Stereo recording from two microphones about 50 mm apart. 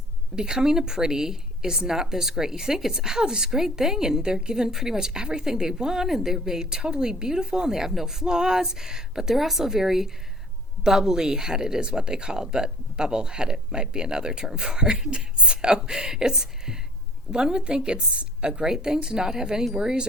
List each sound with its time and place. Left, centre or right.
0.3 s speech: centre